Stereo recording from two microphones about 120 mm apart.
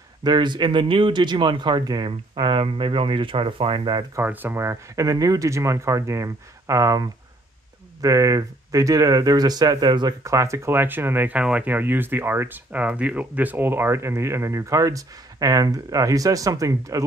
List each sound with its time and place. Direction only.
0.2 s speech: 40° right (ahead or behind)
4.1 s speech: 15° right (ahead or behind); by 10.1 s 35° right (ahead or behind)
10.2 s speech: 25° right (ahead or behind)